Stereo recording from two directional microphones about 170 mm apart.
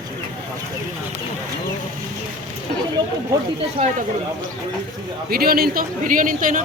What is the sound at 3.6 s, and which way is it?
Speech, 35° right (ahead or behind).